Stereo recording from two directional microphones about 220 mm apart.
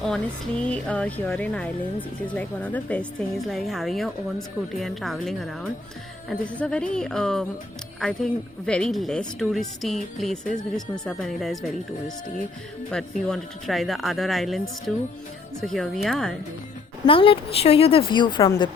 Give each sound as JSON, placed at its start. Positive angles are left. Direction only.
{"t": 0.0, "sound": "speech", "side_deg": 5}
{"t": 15.6, "sound": "speech", "side_deg": 0}
{"t": 17.1, "sound": "a woman's voice", "side_deg": 25}